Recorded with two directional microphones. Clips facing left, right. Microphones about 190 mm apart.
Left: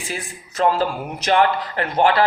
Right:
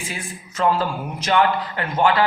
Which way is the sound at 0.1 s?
35° left (ahead or behind).